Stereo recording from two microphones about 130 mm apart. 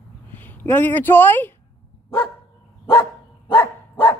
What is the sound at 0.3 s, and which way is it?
Speech, 15° left (ahead or behind).